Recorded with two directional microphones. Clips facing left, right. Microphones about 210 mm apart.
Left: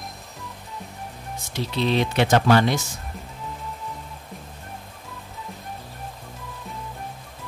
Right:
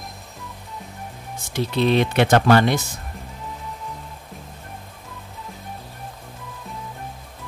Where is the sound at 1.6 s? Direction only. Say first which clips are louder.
Right 4 dB; 55° right (ahead or behind).